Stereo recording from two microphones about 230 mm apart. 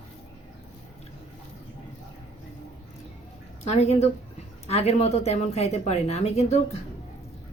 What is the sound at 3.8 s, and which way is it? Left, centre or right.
A woman's voice, left.